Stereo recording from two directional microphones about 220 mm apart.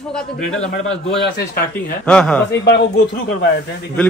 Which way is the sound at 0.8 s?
50° left (ahead or behind).